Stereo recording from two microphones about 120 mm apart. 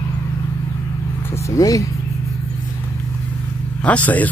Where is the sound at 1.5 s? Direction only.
25° left (ahead or behind).